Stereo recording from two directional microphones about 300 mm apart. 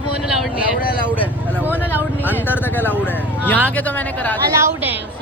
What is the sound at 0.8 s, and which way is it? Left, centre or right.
Speech, left.